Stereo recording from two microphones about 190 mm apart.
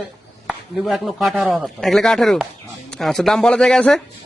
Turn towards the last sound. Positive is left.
turn(degrees=5)  # may be behind; listen again after turning